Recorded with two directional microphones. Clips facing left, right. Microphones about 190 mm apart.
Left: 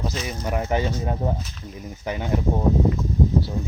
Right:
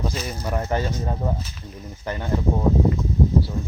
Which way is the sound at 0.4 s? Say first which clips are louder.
Left 1 dB; 10° left (ahead or behind).